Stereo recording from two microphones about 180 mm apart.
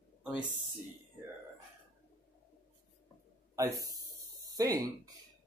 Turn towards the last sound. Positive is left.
turn(degrees=-20)  # may be behind; listen again after turning